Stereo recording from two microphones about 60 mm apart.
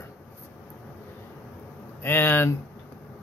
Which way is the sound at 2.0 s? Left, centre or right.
Left.